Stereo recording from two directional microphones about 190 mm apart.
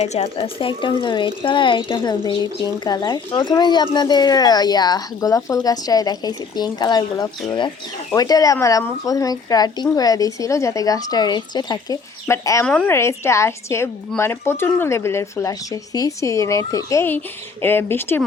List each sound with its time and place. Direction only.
0.0 s speech: 30° left (ahead or behind); by 18.2 s 10° left (ahead or behind)